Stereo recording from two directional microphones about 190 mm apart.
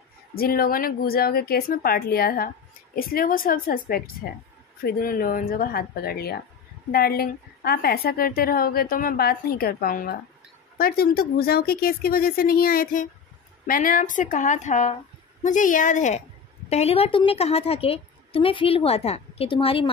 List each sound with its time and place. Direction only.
0.3 s a woman's voice: 50° left (ahead or behind); by 19.9 s 30° left (ahead or behind)